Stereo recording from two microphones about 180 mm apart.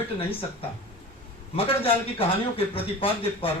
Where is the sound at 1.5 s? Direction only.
30° left (ahead or behind).